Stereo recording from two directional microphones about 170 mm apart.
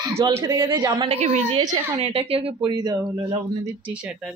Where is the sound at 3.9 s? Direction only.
5° right (ahead or behind).